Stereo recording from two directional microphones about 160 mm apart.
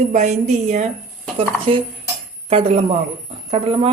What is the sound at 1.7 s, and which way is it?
A woman's voice, 35° right (ahead or behind).